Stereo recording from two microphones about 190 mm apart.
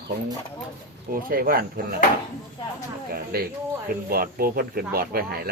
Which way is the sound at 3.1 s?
50° right (ahead or behind).